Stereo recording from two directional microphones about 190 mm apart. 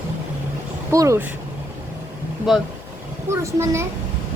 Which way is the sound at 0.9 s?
15° right (ahead or behind).